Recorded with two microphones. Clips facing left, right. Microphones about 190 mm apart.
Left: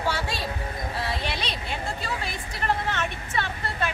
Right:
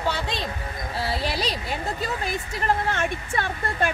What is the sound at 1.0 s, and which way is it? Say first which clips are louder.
Speech: right 5 dB; 35° right (ahead or behind).